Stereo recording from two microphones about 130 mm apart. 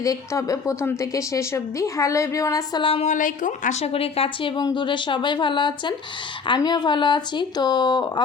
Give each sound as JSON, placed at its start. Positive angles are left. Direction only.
{"t": 0.0, "sound": "a woman's voice", "side_deg": 25}
{"t": 2.8, "sound": "speech", "side_deg": 45}
{"t": 3.1, "sound": "speech", "side_deg": 85}